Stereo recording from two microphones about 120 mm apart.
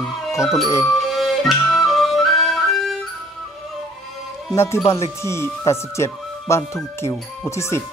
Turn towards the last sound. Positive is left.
turn(degrees=25)  # may be behind; listen again after turning